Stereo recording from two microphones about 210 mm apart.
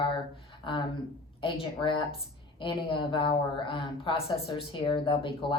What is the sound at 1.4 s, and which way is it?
A woman's voice, 25° left (ahead or behind).